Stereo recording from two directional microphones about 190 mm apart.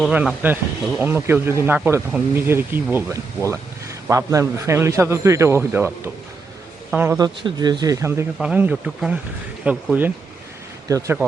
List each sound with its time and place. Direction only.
0.0 s speech: 5° right (ahead or behind)
4.1 s speech: 15° right (ahead or behind)
6.9 s speech: 10° right (ahead or behind)
7.4 s speech: 20° right (ahead or behind)